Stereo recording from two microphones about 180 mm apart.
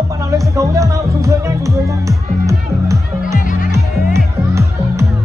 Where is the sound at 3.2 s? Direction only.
45° left (ahead or behind).